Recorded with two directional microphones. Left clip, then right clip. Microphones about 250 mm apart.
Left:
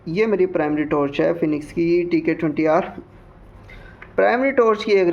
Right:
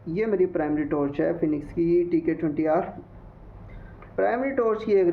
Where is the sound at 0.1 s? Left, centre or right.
Left.